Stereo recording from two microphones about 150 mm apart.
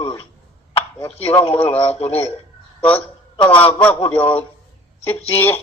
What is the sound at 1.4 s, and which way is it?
Speech, 45° left (ahead or behind).